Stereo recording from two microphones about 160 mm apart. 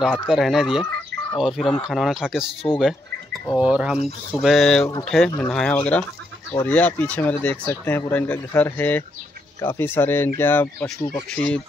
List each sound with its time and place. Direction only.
0.0 s speech: centre (ahead or behind)
3.5 s speech: 5° right (ahead or behind)